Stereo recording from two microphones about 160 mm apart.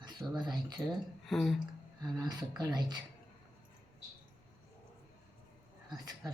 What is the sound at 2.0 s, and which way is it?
Speech, 25° right (ahead or behind).